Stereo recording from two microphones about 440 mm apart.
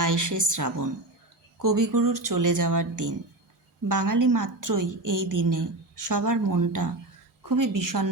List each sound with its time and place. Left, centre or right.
0.0 s a woman's voice: right